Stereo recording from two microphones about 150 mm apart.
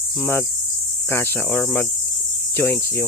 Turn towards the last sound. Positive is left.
turn(degrees=15)  # may be behind; listen again after turning